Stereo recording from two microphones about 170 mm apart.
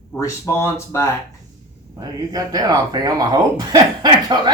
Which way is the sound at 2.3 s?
20° right (ahead or behind).